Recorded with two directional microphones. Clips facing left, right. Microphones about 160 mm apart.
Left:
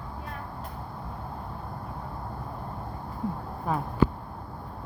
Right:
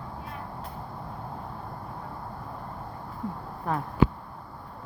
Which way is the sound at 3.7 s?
5° left (ahead or behind).